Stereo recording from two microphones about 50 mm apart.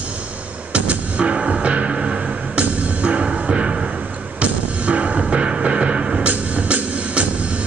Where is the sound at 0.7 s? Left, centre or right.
Right.